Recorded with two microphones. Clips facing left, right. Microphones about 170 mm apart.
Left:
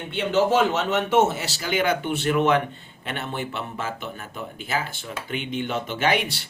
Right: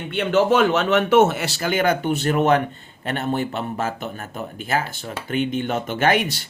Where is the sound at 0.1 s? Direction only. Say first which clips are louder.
Right 3 dB; 60° right (ahead or behind).